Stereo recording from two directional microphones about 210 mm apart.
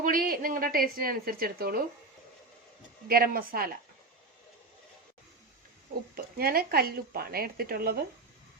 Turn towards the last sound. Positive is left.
turn(degrees=-45)  # may be behind; listen again after turning